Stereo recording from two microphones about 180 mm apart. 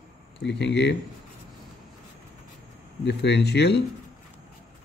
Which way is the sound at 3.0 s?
70° left (ahead or behind).